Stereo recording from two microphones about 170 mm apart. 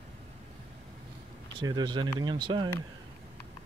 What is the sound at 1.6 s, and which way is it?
Speech, 25° right (ahead or behind).